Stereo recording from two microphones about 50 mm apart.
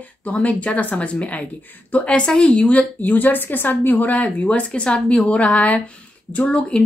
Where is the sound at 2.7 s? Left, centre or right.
Left.